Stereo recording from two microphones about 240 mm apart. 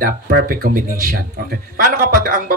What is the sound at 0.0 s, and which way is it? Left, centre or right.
Speech, right.